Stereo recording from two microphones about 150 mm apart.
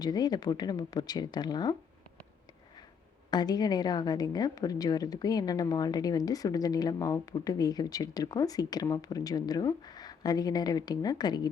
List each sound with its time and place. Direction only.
0.0 s a woman's voice: 25° left (ahead or behind)
3.2 s a woman's voice: 25° left (ahead or behind)